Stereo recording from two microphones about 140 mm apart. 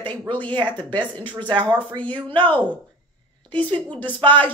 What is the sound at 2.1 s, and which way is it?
Speech, 35° right (ahead or behind).